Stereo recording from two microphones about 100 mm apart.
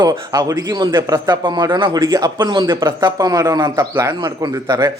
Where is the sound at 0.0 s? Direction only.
40° right (ahead or behind).